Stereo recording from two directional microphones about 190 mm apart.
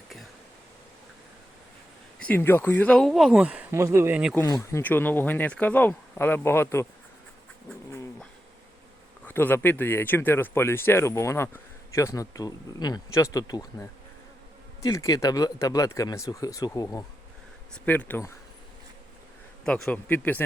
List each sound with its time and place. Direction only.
2.1 s speech: 10° left (ahead or behind)
4.4 s speech: 15° left (ahead or behind)
9.2 s speech: 10° left (ahead or behind)
19.6 s speech: 5° left (ahead or behind)